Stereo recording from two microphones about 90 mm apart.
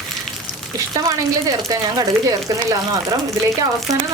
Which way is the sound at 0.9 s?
40° right (ahead or behind).